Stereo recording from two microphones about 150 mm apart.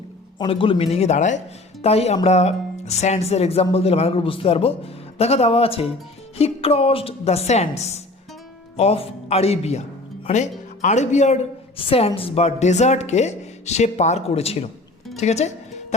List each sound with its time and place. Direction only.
0.3 s speech: 35° left (ahead or behind)
11.8 s speech: 40° left (ahead or behind)
15.1 s music: 45° left (ahead or behind)